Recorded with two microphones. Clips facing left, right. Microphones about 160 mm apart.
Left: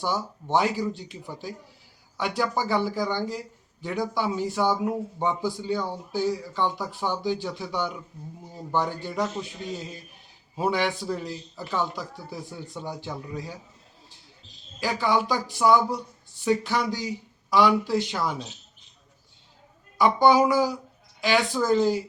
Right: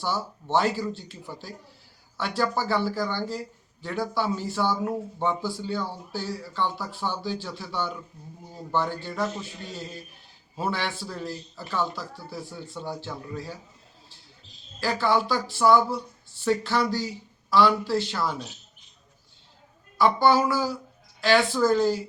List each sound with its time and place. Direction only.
0.0 s a man's voice: 15° left (ahead or behind)
10.5 s a man's voice: 15° left (ahead or behind)
14.8 s a man's voice: 15° left (ahead or behind)
20.0 s a man's voice: 15° left (ahead or behind)